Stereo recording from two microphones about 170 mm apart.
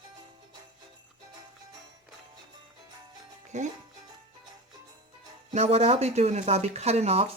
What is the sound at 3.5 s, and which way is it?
Music, 45° right (ahead or behind).